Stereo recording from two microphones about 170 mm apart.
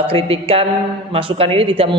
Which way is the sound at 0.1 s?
35° right (ahead or behind).